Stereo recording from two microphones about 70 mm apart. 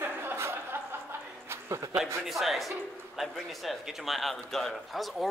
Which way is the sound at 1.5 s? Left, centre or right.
Right.